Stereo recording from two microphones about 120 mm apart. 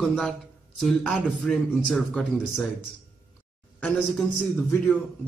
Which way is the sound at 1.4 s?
5° left (ahead or behind).